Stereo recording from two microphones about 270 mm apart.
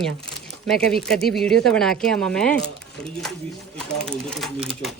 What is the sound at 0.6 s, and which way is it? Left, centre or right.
A woman's voice, centre.